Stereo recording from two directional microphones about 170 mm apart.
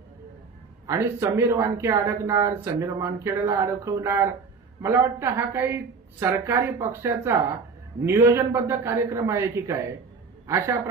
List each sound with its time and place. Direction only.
0.8 s a man's voice: 15° right (ahead or behind)